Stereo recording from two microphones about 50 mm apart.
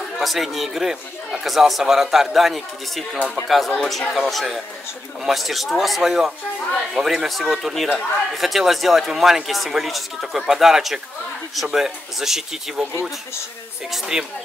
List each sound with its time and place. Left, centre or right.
0.2 s speech: centre
13.9 s speech: centre